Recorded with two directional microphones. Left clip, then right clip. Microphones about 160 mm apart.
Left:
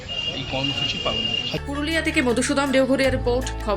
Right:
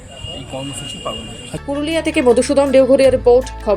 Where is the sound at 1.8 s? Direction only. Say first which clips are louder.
Right 7 dB; 20° right (ahead or behind).